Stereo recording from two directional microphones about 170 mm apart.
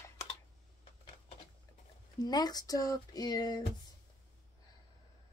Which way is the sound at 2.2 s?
25° left (ahead or behind).